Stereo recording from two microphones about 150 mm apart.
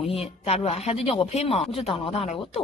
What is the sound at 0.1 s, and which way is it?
Speech, 45° left (ahead or behind).